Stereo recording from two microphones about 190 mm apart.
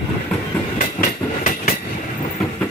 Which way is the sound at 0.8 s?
40° left (ahead or behind).